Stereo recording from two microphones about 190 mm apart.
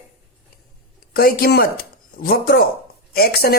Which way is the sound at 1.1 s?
50° left (ahead or behind).